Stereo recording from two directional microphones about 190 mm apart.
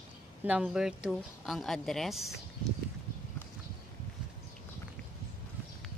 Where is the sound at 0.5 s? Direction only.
5° right (ahead or behind).